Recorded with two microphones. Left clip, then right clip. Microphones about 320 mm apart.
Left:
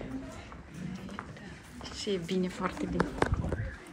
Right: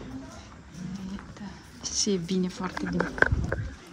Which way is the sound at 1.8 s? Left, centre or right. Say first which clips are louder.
Right 6 dB; centre.